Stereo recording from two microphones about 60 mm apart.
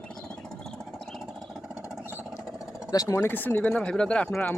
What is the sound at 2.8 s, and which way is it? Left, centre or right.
Speech, left.